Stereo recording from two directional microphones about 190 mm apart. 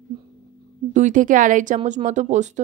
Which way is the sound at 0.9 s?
40° right (ahead or behind).